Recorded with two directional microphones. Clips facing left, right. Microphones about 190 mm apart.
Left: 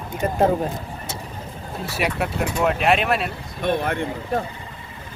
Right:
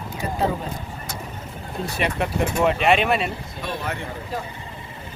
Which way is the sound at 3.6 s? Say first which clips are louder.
Left 8 dB; 55° left (ahead or behind).